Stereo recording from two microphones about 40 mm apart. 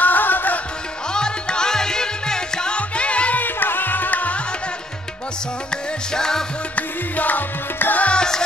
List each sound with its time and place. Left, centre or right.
0.0 s music: left
1.1 s music: centre
2.7 s music: left
3.3 s music: left
6.1 s music: centre
6.7 s music: left
8.0 s music: left